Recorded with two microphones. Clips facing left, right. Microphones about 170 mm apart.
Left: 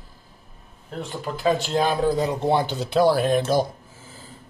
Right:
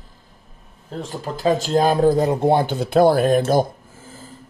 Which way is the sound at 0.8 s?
35° right (ahead or behind).